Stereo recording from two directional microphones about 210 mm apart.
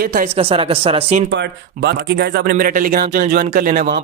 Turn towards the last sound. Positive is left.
turn(degrees=-45)  # may be behind; listen again after turning